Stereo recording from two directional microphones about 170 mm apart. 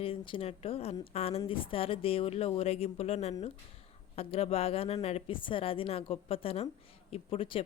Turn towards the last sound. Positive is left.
turn(degrees=35)  # may be behind; listen again after turning